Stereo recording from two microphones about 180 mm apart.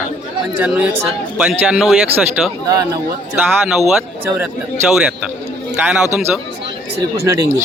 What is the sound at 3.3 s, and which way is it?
Speech, 5° right (ahead or behind).